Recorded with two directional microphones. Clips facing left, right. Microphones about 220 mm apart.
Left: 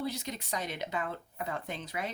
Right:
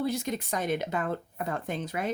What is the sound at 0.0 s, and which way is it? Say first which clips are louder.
Speech: right 7 dB; 50° right (ahead or behind).